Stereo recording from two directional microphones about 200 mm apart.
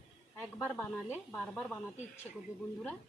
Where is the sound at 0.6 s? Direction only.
10° left (ahead or behind).